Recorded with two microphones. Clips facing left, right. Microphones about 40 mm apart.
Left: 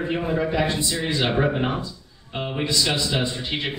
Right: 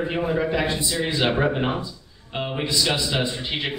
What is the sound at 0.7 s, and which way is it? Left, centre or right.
Speech, right.